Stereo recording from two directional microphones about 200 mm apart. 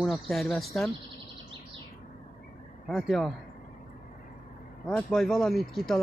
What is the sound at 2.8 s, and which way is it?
Speech, centre (ahead or behind).